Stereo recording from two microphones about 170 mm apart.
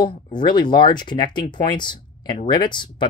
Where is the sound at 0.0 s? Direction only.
25° left (ahead or behind).